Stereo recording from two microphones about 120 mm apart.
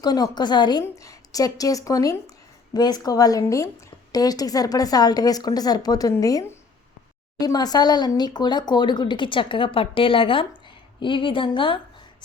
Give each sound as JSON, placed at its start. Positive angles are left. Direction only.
{"t": 0.0, "sound": "a woman's voice", "side_deg": 35}